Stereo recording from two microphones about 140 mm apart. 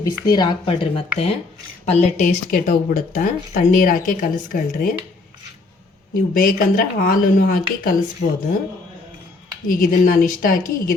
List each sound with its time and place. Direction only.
0.0 s a woman's voice: 30° left (ahead or behind)
1.8 s speech: 55° left (ahead or behind); by 4.9 s 80° left
6.1 s speech: 90° left
9.6 s speech: 75° left (ahead or behind); by 10.9 s 90° left